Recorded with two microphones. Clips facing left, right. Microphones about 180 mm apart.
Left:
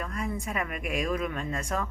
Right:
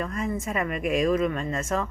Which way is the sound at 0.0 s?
Centre (ahead or behind).